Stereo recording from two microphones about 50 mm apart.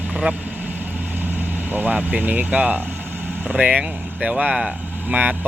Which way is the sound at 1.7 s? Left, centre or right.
Right.